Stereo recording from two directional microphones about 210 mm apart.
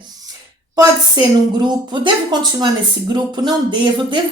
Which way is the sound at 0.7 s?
20° right (ahead or behind).